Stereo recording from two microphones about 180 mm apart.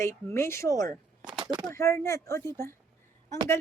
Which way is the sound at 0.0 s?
15° left (ahead or behind).